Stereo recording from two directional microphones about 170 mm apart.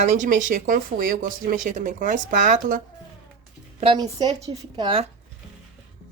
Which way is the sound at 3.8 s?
30° right (ahead or behind).